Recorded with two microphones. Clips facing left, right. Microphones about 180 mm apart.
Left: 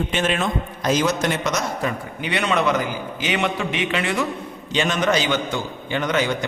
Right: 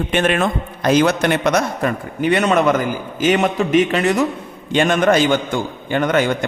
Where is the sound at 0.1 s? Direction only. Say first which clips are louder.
Right 5 dB; 60° right (ahead or behind); by 4.3 s 40° right (ahead or behind).